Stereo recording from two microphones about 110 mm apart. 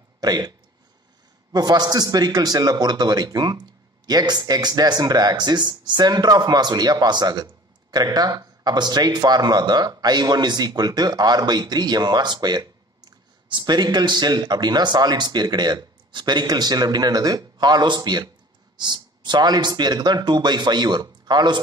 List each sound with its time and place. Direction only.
0.2 s speech: 35° right (ahead or behind)
1.5 s speech: 40° right (ahead or behind)